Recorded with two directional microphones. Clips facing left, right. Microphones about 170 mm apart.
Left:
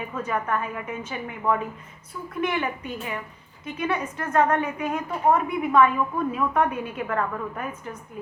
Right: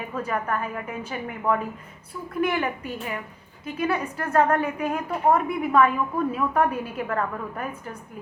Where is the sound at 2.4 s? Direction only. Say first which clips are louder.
Right 1 dB; 35° right (ahead or behind).